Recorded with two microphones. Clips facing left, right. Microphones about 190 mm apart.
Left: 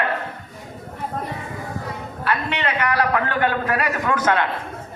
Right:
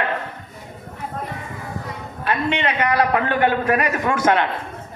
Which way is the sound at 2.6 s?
20° right (ahead or behind).